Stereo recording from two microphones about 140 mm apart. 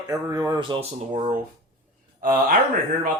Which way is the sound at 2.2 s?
90° right.